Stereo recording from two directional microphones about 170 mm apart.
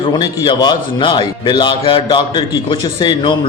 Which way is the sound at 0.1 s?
25° left (ahead or behind).